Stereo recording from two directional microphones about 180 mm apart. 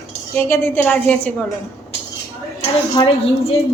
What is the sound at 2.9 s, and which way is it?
Speech, 30° left (ahead or behind).